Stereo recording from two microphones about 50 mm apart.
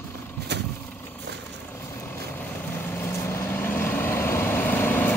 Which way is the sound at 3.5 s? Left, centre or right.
Left.